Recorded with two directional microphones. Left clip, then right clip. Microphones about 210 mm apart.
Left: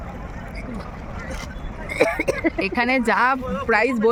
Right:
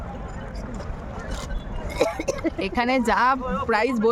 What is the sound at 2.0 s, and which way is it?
Vehicle, 40° left (ahead or behind).